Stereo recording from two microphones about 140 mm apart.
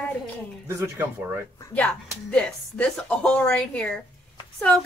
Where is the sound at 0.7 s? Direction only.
15° right (ahead or behind).